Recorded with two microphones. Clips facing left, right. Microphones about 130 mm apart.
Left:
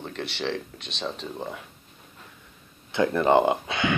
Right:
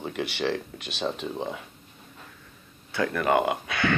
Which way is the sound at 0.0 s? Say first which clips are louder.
Right 2 dB; 5° right (ahead or behind).